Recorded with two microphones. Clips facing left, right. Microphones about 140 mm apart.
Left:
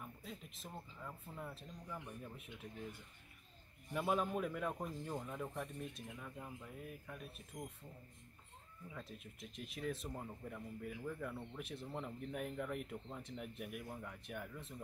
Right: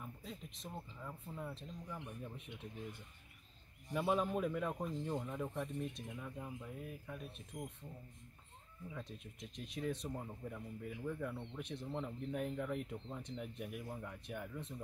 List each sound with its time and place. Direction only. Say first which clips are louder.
0.0 s speech: right 2 dB; centre (ahead or behind)
3.9 s speech: right 2 dB; centre (ahead or behind)
8.9 s speech: right 1 dB; 5° left (ahead or behind)